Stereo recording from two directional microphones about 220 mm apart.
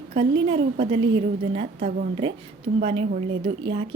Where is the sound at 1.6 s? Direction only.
40° right (ahead or behind).